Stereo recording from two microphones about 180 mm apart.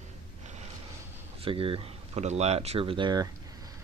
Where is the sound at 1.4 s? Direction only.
30° right (ahead or behind).